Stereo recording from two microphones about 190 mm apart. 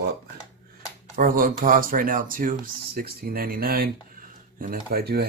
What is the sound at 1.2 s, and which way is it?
Speech, 45° right (ahead or behind).